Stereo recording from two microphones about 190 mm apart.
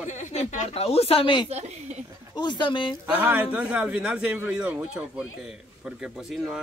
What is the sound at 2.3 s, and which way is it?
Speech, 25° left (ahead or behind).